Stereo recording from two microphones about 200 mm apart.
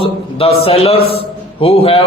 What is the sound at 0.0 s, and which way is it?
A man's voice, 30° left (ahead or behind).